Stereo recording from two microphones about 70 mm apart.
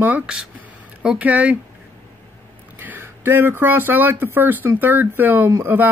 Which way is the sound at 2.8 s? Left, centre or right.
Right.